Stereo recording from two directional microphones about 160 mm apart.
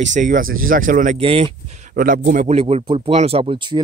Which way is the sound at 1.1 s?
40° right (ahead or behind).